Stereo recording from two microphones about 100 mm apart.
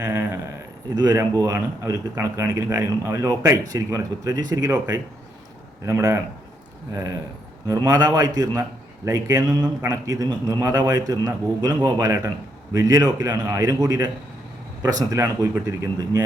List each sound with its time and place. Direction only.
0.0 s a man's voice: 30° right (ahead or behind)